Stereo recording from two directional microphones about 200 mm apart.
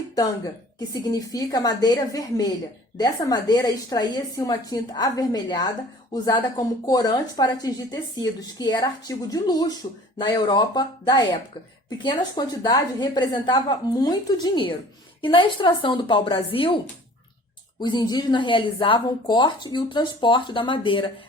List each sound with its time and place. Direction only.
0.9 s speech: 20° left (ahead or behind)
6.8 s speech: 20° left (ahead or behind)